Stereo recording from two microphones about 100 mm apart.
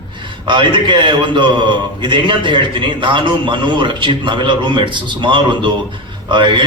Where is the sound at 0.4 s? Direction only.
50° right (ahead or behind).